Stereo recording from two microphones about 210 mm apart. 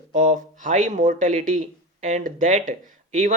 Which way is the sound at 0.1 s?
35° right (ahead or behind).